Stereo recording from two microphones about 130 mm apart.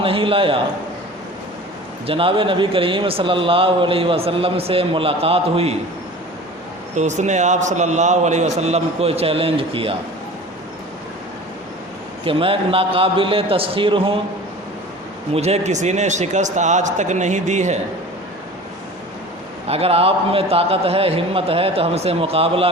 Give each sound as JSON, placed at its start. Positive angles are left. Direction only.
{"t": 0.0, "sound": "speech", "side_deg": -45}
{"t": 2.0, "sound": "speech", "side_deg": -45}
{"t": 6.9, "sound": "a man's voice", "side_deg": -65}
{"t": 12.2, "sound": "speech", "side_deg": -45}
{"t": 15.3, "sound": "a man's voice", "side_deg": -55}
{"t": 19.6, "sound": "speech", "side_deg": -50}